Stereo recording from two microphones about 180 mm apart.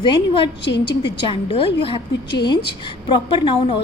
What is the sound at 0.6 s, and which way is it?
Speech, 75° left (ahead or behind).